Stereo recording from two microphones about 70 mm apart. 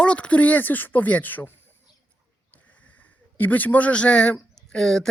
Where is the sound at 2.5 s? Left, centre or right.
Left; by 5.1 s centre.